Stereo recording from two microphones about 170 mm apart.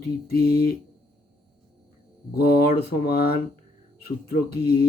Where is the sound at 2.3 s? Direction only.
65° left (ahead or behind).